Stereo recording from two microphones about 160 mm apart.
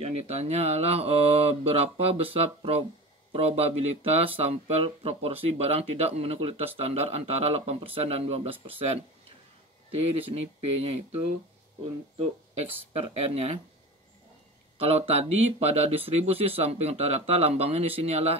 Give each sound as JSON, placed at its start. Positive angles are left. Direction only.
{"t": 0.0, "sound": "speech", "side_deg": -40}
{"t": 12.9, "sound": "speech", "side_deg": -40}
{"t": 14.8, "sound": "speech", "side_deg": -40}